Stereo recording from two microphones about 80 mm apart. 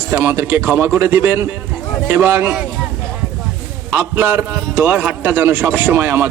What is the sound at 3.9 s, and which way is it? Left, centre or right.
A man's voice, right.